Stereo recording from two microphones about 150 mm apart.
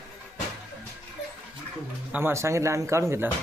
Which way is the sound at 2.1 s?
15° right (ahead or behind).